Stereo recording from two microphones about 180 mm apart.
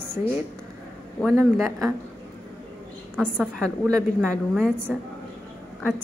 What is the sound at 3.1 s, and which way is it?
Speech, 10° right (ahead or behind).